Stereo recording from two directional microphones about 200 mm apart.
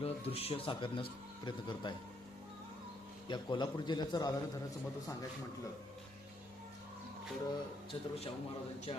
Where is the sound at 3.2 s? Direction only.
20° left (ahead or behind).